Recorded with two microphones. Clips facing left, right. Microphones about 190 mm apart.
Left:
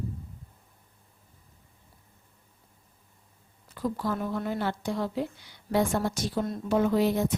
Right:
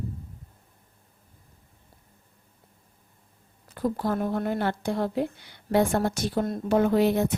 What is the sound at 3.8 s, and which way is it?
A woman's voice, 55° right (ahead or behind).